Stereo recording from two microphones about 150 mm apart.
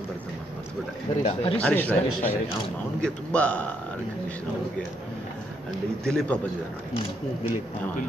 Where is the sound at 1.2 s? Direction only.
40° left (ahead or behind).